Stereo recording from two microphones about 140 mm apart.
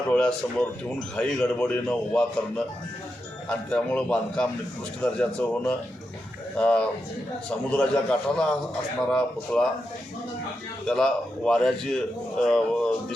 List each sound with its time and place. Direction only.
0.1 s a man's voice: 10° left (ahead or behind)
10.8 s a man's voice: 5° left (ahead or behind)